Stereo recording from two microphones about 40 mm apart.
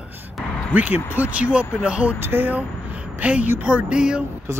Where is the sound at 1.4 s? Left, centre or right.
Right.